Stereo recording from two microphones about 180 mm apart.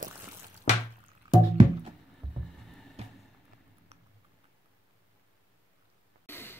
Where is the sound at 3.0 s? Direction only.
35° right (ahead or behind).